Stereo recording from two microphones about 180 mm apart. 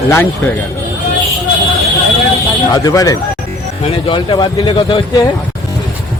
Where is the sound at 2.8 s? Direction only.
20° left (ahead or behind).